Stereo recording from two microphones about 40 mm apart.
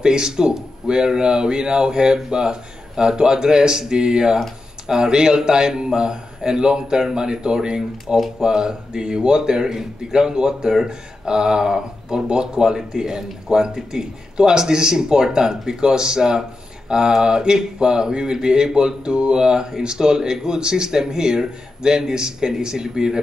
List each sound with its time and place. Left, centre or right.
0.0 s a man's voice: centre